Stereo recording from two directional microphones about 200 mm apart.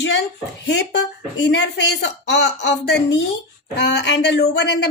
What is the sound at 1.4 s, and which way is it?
Speech, 60° left (ahead or behind).